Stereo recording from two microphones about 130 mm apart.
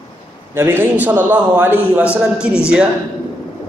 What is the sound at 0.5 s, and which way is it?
A man's voice, 15° right (ahead or behind).